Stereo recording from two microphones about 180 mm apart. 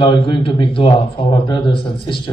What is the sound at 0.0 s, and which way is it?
A man's voice, 30° left (ahead or behind).